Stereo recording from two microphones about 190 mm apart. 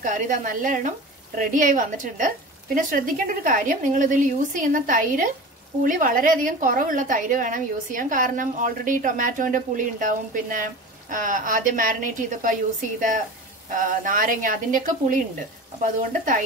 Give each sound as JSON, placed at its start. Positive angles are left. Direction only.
{"t": 0.0, "sound": "a woman's voice", "side_deg": -45}
{"t": 13.7, "sound": "a woman's voice", "side_deg": -45}